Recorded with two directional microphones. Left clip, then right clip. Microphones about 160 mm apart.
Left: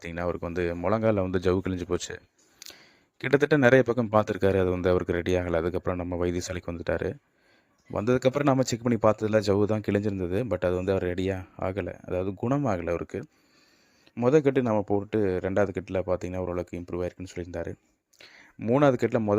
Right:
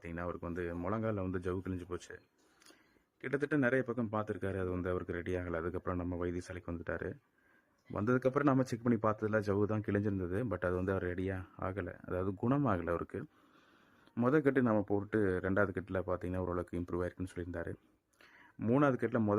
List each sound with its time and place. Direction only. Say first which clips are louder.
0.0 s speech: left 11 dB; 40° left (ahead or behind)